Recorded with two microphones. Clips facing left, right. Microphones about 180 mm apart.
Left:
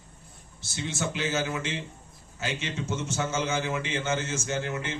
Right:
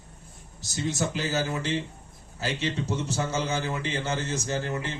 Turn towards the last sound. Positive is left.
turn(degrees=-35)  # may be behind; listen again after turning